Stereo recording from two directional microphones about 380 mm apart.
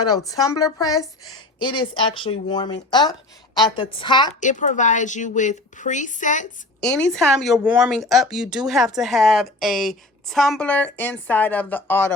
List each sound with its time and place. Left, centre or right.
0.3 s a woman's voice: centre
6.8 s speech: centre